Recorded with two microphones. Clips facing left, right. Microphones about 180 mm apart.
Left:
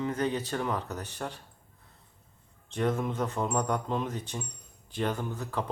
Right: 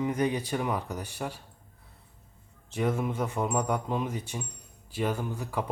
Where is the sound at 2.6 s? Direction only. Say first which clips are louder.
Even; 10° right (ahead or behind).